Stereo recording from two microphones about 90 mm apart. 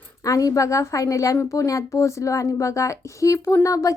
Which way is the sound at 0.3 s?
40° left (ahead or behind).